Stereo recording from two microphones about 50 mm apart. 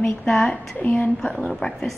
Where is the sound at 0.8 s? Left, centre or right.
Left.